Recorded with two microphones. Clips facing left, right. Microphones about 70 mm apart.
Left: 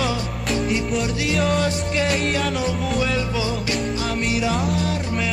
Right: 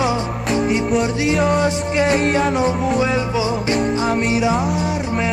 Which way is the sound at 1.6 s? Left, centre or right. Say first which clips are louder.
Right 4 dB; right.